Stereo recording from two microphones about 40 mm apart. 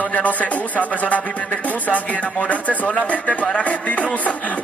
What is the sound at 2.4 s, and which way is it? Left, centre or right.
Speech, left.